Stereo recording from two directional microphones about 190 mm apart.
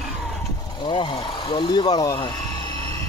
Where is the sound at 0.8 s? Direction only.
25° left (ahead or behind).